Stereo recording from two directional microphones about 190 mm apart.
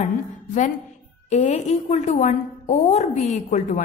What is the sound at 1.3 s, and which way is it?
A woman's voice, 35° left (ahead or behind).